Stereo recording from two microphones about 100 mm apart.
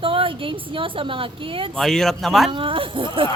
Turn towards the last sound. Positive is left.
turn(degrees=-60)  # may be behind; listen again after turning